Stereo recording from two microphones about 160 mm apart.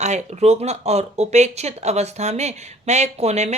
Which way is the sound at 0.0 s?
45° right (ahead or behind).